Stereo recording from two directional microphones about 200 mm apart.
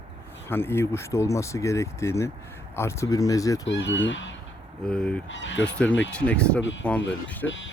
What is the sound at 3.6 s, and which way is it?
Speech, 65° left (ahead or behind).